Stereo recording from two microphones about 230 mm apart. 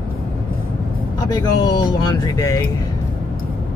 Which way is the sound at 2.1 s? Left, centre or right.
Centre.